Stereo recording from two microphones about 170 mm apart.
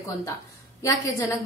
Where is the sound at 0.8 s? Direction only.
15° left (ahead or behind).